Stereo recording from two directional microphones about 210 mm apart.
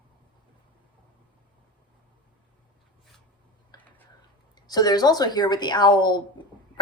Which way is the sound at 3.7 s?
20° left (ahead or behind).